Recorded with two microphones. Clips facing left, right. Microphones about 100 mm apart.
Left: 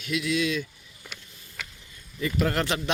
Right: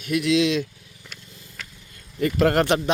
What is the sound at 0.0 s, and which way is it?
Speech, 50° right (ahead or behind).